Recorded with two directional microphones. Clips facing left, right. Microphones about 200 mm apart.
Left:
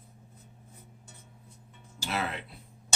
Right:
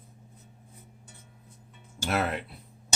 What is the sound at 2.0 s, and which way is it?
Music, 55° right (ahead or behind).